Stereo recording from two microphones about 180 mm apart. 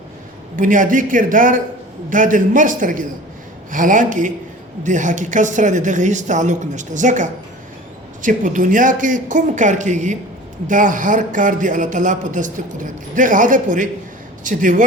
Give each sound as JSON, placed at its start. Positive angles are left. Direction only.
{"t": 0.5, "sound": "speech", "side_deg": -45}